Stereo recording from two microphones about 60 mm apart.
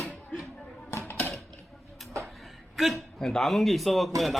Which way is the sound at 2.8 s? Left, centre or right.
Centre.